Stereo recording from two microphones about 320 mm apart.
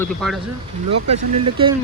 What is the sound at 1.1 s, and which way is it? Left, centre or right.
Speech, centre.